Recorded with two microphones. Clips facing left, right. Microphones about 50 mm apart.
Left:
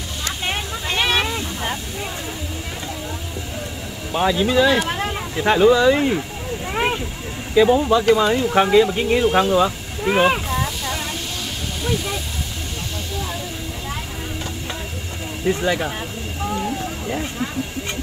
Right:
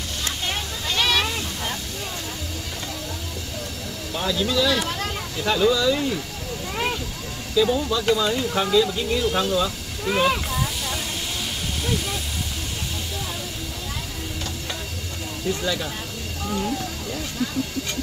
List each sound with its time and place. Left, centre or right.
0.2 s vehicle: left
4.1 s speech: left
6.7 s vehicle: left
7.5 s speech: left
15.4 s speech: left
16.4 s vehicle: left